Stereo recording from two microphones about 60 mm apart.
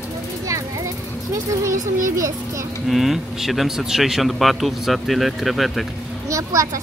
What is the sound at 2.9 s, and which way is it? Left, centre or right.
Speech, centre.